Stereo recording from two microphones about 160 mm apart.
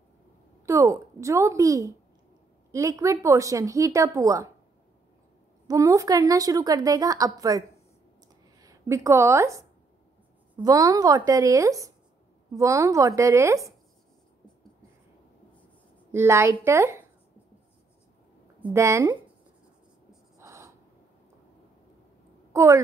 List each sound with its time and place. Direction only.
0.7 s a woman's voice: 20° right (ahead or behind)
5.7 s a woman's voice: 20° right (ahead or behind)
16.1 s a woman's voice: 15° right (ahead or behind)
18.6 s a woman's voice: 15° right (ahead or behind)
20.3 s a sound: 20° right (ahead or behind)
22.5 s a woman's voice: 20° right (ahead or behind)